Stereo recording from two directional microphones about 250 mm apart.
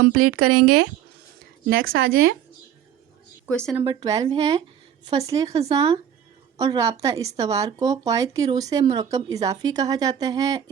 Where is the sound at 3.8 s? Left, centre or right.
Centre.